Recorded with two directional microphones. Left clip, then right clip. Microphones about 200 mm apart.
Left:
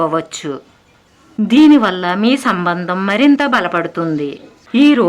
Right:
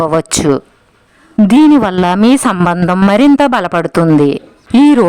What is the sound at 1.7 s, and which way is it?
Speech, 50° right (ahead or behind).